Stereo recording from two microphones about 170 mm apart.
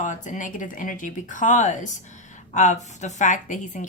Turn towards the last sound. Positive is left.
turn(degrees=50)  # may be behind; listen again after turning